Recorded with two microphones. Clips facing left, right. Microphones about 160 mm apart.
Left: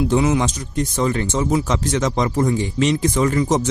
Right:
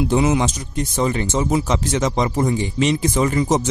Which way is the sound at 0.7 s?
5° right (ahead or behind).